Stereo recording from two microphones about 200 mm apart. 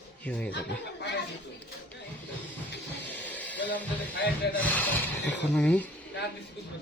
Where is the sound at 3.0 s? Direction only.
10° left (ahead or behind).